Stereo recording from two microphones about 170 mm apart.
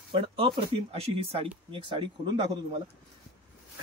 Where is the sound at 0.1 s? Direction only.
30° right (ahead or behind).